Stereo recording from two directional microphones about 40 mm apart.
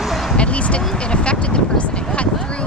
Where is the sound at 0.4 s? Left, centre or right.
Left.